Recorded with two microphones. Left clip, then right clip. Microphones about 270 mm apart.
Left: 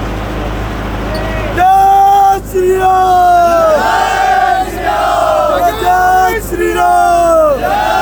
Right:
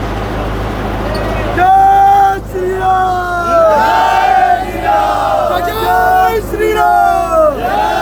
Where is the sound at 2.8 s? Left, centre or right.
Left.